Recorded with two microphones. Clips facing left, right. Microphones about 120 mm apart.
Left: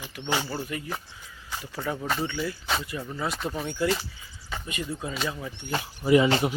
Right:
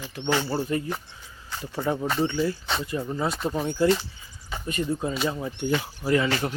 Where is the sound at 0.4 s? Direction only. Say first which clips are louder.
Right 6 dB; 35° right (ahead or behind).